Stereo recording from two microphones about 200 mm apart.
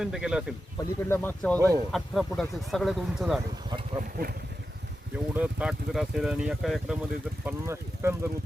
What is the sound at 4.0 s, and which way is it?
Speech, 45° right (ahead or behind).